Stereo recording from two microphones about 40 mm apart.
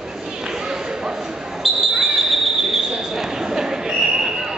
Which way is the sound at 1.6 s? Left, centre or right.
Centre.